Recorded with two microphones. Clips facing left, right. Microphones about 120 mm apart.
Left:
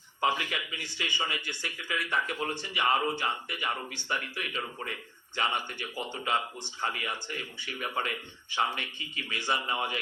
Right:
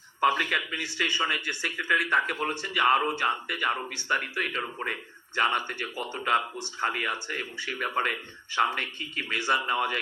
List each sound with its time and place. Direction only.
0.2 s speech: 55° right (ahead or behind)